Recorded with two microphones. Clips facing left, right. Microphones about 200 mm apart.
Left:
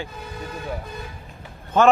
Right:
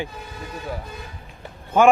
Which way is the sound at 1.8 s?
10° right (ahead or behind).